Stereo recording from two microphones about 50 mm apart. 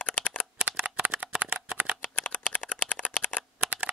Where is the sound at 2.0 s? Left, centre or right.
Left.